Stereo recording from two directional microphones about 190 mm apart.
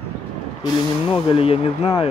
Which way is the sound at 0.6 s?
25° left (ahead or behind).